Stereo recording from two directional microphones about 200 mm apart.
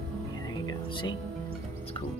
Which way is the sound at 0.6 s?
25° left (ahead or behind).